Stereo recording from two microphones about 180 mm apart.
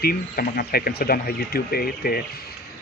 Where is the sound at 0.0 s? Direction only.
55° left (ahead or behind).